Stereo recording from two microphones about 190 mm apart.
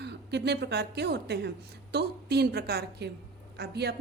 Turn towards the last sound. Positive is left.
turn(degrees=-60)  # may be behind; listen again after turning